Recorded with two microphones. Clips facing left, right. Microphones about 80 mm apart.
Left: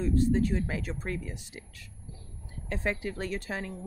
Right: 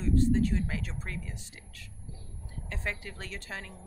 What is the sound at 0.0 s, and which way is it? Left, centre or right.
Speech, centre.